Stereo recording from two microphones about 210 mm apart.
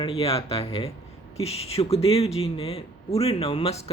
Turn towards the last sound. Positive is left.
turn(degrees=30)  # may be behind; listen again after turning